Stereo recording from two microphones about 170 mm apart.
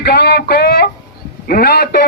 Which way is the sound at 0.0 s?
70° left (ahead or behind).